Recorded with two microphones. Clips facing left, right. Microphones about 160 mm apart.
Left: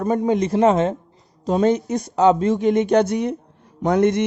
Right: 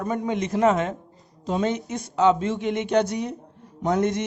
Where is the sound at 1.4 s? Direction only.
40° left (ahead or behind).